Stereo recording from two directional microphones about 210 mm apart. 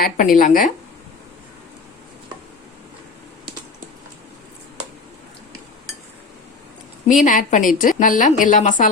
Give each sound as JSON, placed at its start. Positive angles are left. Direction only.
{"t": 0.0, "sound": "a woman's voice", "side_deg": 40}
{"t": 7.1, "sound": "a woman's voice", "side_deg": 40}